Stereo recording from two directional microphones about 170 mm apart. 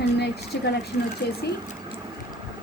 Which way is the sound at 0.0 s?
75° left (ahead or behind).